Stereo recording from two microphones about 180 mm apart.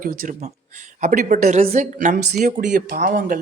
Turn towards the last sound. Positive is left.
turn(degrees=-50)  # may be behind; listen again after turning